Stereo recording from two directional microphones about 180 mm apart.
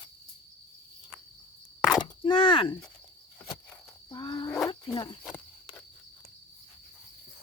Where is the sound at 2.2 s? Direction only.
30° left (ahead or behind).